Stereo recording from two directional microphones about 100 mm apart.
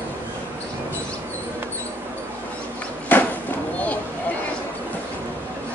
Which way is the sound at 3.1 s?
15° left (ahead or behind).